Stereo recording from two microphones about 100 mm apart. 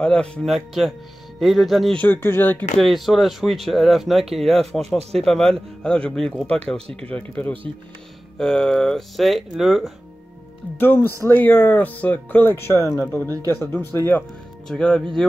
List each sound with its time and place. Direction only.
0.0 s speech: 10° left (ahead or behind)
2.0 s speech: 20° left (ahead or behind)
2.8 s speech: centre (ahead or behind)
4.8 s speech: 90° right
5.2 s speech: 5° left (ahead or behind)
10.8 s speech: 20° left (ahead or behind)
14.7 s speech: 5° left (ahead or behind)